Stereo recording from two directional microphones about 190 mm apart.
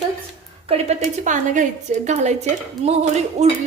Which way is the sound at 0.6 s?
35° right (ahead or behind).